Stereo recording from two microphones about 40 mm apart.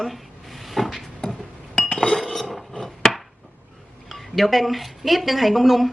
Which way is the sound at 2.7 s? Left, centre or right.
Centre.